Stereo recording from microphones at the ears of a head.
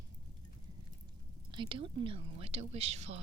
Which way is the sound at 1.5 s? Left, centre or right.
Right.